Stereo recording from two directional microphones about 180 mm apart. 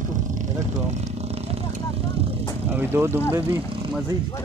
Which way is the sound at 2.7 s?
10° right (ahead or behind).